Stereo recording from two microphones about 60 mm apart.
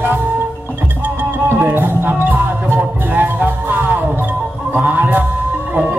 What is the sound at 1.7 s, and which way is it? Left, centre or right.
Music, right.